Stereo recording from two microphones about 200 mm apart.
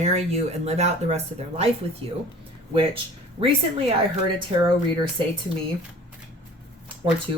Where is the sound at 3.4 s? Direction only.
30° right (ahead or behind).